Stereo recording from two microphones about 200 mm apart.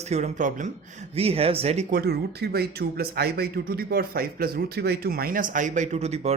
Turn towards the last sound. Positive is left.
turn(degrees=-35)  # may be behind; listen again after turning